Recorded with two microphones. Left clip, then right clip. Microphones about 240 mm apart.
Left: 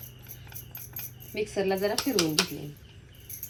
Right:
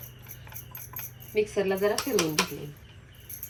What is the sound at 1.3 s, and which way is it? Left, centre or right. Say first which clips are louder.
Speech: right 2 dB; right.